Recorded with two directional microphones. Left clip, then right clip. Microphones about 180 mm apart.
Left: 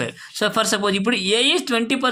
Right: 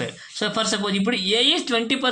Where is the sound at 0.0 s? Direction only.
35° left (ahead or behind).